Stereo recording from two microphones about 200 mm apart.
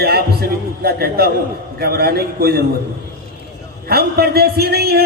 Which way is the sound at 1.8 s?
50° right (ahead or behind).